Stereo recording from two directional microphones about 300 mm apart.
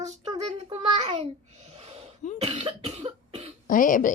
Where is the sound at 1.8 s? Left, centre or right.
Centre.